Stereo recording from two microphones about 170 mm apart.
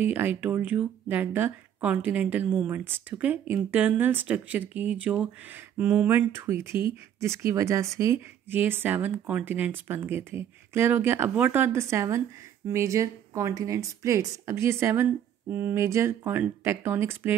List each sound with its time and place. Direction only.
0.0 s speech: 10° right (ahead or behind)